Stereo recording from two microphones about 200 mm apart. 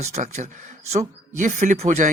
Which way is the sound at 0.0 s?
35° right (ahead or behind).